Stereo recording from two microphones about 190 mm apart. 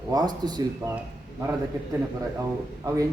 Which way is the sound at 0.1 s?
20° right (ahead or behind).